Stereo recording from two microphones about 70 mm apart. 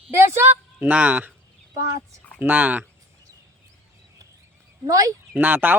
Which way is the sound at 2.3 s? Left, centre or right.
Right.